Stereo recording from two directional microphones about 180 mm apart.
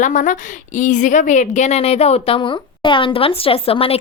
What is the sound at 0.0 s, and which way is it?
A woman's voice, 45° left (ahead or behind).